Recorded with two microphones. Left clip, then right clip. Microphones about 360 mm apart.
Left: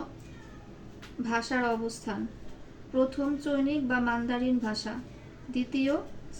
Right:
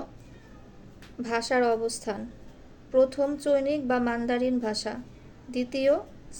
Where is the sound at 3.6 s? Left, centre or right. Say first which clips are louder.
Right 2 dB; right.